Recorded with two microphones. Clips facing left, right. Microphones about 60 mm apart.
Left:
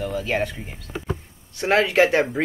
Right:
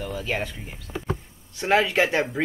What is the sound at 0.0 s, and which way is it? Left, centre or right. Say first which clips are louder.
Speech: left 4 dB; centre.